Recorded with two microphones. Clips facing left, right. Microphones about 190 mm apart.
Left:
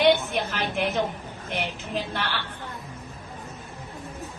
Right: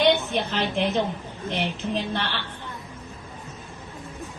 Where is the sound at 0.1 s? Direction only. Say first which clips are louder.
Even; centre (ahead or behind).